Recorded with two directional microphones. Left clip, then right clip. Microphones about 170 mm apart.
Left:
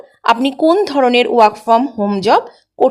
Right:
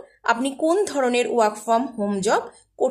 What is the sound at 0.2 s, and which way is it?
A woman's voice, 25° left (ahead or behind).